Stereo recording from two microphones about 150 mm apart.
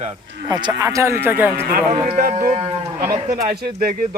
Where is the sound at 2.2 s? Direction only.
60° right (ahead or behind).